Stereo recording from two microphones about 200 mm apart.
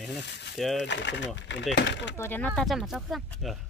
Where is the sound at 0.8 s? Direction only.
60° left (ahead or behind).